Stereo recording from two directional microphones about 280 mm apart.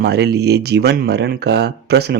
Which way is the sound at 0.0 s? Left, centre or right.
Right.